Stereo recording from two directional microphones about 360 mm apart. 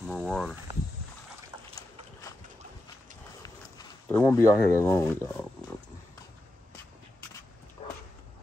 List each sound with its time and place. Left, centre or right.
0.0 s speech: centre
3.4 s speech: centre
7.8 s dog: centre